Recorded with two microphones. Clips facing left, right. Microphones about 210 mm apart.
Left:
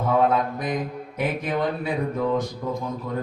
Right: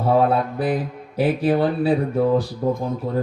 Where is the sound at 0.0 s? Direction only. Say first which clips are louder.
Right 3 dB; 35° right (ahead or behind).